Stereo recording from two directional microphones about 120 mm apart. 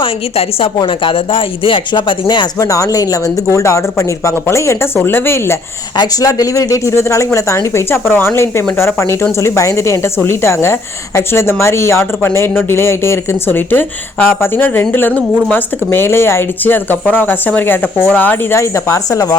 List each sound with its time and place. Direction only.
0.0 s a woman's voice: 50° left (ahead or behind); by 5.5 s 20° left (ahead or behind)
6.0 s a woman's voice: 30° left (ahead or behind)